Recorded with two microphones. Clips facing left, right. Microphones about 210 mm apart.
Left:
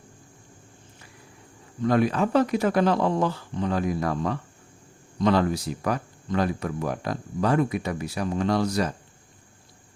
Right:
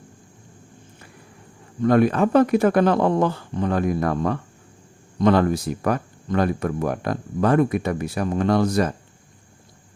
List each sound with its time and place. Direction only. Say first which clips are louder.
1.8 s speech: right 5 dB; 50° right (ahead or behind)